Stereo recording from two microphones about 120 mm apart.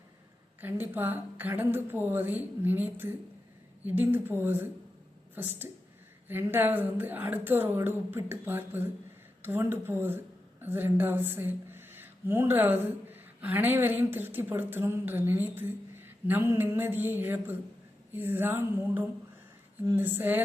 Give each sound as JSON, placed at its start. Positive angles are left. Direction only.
{"t": 0.6, "sound": "a woman's voice", "side_deg": -15}